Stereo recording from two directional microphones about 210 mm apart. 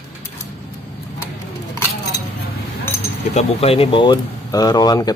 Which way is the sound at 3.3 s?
30° left (ahead or behind).